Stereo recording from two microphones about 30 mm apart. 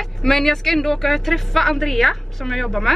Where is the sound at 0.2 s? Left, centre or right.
Centre.